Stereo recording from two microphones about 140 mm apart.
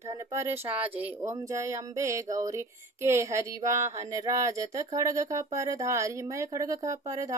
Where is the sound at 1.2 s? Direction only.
20° right (ahead or behind).